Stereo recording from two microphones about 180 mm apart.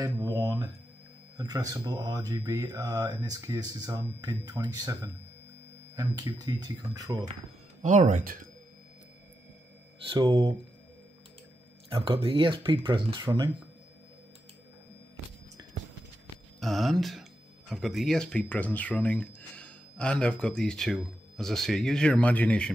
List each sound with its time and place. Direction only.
0.0 s speech: 20° right (ahead or behind)
7.8 s speech: 40° right (ahead or behind)
10.0 s speech: 25° right (ahead or behind)
11.9 s speech: 30° right (ahead or behind)
16.5 s speech: centre (ahead or behind)